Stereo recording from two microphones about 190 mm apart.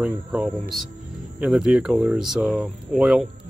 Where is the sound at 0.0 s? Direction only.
5° right (ahead or behind).